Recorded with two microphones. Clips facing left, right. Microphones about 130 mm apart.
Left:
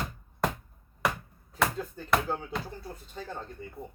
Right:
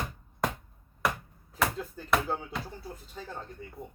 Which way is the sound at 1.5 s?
Centre (ahead or behind).